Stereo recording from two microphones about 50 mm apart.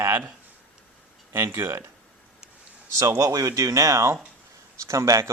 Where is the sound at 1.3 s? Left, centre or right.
Right.